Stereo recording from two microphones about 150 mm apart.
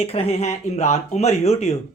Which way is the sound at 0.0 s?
45° left (ahead or behind).